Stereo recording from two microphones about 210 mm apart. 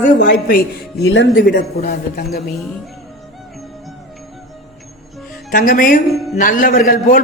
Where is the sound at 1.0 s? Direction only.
70° left (ahead or behind).